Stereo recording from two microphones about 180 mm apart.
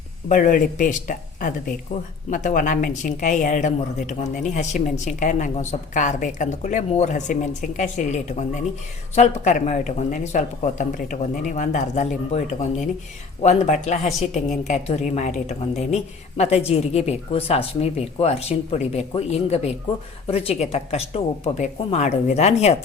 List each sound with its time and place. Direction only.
0.3 s speech: 45° left (ahead or behind)
13.4 s speech: 40° left (ahead or behind)